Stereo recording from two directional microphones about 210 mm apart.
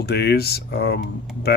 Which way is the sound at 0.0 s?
50° left (ahead or behind).